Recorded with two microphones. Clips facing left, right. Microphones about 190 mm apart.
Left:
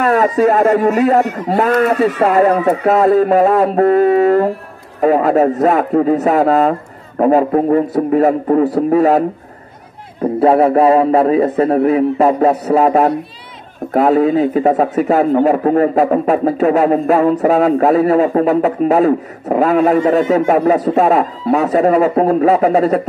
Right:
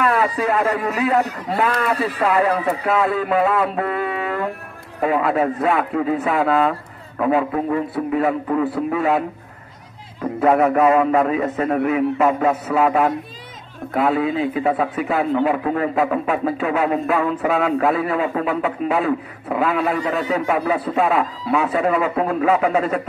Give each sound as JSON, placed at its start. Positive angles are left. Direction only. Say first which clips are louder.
{"t": 0.0, "sound": "a man's voice", "louder": "left 7 dB", "side_deg": 40}
{"t": 10.2, "sound": "a man's voice", "louder": "left 5 dB", "side_deg": 30}